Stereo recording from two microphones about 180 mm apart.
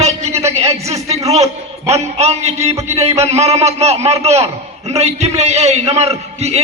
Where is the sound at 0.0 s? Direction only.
40° right (ahead or behind).